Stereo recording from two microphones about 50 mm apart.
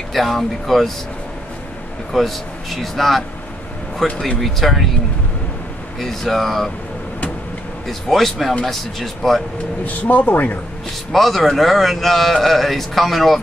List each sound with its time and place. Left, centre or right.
0.1 s a man's voice: centre
2.1 s a man's voice: centre
5.9 s a man's voice: centre
8.1 s a man's voice: centre
9.8 s speech: left
11.1 s a man's voice: centre